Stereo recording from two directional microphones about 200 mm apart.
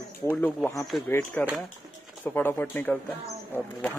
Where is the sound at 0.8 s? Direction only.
Centre (ahead or behind).